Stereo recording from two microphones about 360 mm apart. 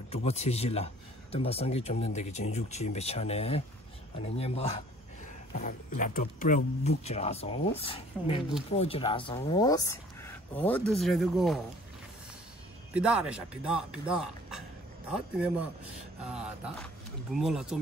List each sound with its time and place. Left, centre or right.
0.1 s speech: centre
12.9 s speech: centre